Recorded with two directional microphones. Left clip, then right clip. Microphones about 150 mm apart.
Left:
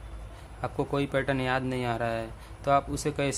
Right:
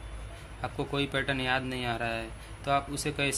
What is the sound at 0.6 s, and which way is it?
Speech, 40° left (ahead or behind).